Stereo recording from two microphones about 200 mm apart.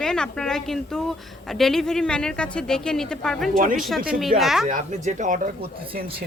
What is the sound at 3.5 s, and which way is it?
Speech, 45° right (ahead or behind).